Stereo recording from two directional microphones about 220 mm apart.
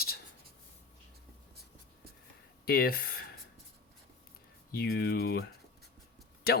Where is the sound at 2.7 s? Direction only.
45° left (ahead or behind).